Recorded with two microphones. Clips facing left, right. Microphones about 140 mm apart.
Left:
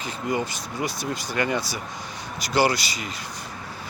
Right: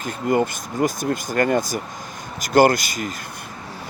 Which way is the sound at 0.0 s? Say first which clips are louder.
Right 6 dB; 50° right (ahead or behind).